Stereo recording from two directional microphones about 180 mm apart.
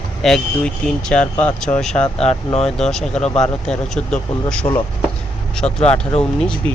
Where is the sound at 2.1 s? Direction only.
35° left (ahead or behind).